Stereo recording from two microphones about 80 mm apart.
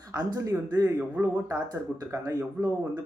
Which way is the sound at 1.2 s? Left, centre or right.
Right.